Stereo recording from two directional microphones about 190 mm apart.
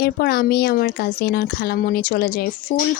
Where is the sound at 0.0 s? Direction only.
55° left (ahead or behind).